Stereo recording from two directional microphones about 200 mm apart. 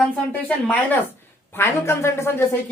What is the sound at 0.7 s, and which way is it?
Speech, 10° left (ahead or behind).